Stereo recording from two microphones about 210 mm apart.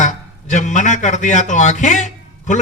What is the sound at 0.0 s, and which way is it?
A man's voice, 35° left (ahead or behind).